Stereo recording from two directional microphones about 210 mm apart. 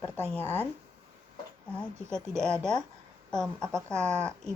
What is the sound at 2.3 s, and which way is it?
A woman's voice, 5° left (ahead or behind).